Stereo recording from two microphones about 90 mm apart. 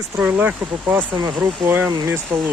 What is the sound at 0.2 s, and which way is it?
Speech, 15° right (ahead or behind).